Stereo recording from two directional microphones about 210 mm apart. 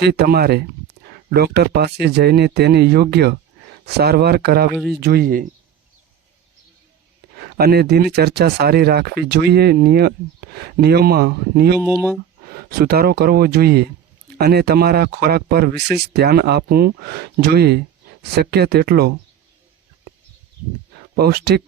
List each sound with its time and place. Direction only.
0.0 s speech: 50° right (ahead or behind)
4.7 s speech: centre (ahead or behind)
5.0 s speech: 45° right (ahead or behind)
7.3 s speech: 50° right (ahead or behind)
11.8 s speech: centre (ahead or behind)
12.5 s speech: 45° right (ahead or behind)
21.2 s speech: 50° right (ahead or behind)